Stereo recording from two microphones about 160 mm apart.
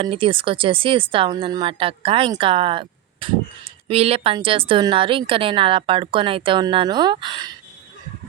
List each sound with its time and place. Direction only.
0.0 s speech: 35° right (ahead or behind)